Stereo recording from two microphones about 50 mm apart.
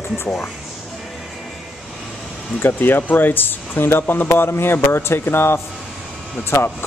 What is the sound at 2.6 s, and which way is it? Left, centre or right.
Speech, left.